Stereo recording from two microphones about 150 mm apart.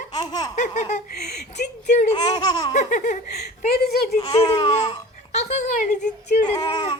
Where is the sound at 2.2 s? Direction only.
30° left (ahead or behind).